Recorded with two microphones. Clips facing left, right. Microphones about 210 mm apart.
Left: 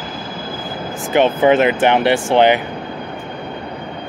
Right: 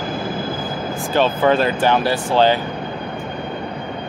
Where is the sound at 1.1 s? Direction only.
20° left (ahead or behind).